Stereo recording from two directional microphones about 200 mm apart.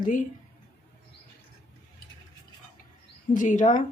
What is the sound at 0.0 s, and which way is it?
Speech, 40° left (ahead or behind).